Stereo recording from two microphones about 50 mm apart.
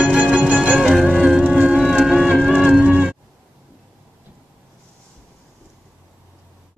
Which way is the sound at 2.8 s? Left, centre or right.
Right.